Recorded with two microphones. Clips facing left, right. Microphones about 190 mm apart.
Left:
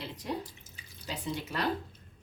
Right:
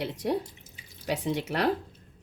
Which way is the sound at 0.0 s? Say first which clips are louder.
Right 8 dB; 75° right (ahead or behind).